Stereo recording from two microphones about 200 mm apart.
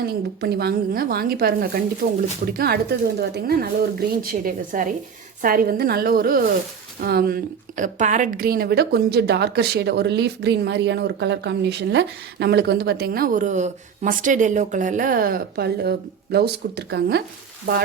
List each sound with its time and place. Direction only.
0.0 s a woman's voice: 50° right (ahead or behind)